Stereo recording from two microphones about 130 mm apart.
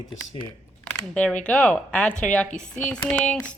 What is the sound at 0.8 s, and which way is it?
Speech, 10° left (ahead or behind).